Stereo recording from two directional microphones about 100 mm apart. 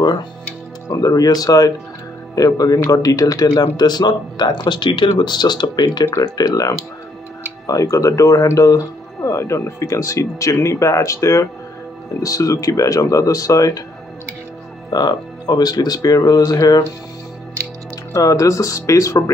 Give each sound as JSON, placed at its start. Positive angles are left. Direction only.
{"t": 0.8, "sound": "speech", "side_deg": 35}
{"t": 14.9, "sound": "speech", "side_deg": 45}
{"t": 18.1, "sound": "speech", "side_deg": 35}